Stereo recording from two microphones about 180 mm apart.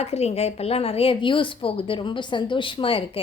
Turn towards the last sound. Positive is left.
turn(degrees=30)  # may be behind; listen again after turning